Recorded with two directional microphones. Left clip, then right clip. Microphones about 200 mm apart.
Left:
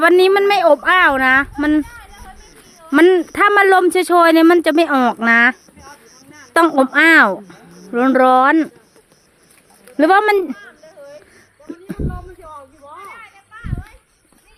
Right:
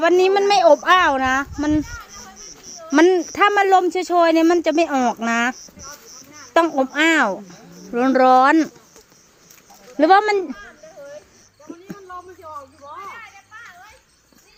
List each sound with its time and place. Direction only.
0.0 s speech: 20° left (ahead or behind)
2.9 s speech: 20° left (ahead or behind)
10.0 s speech: 20° left (ahead or behind)
10.6 s a sound: 40° left (ahead or behind)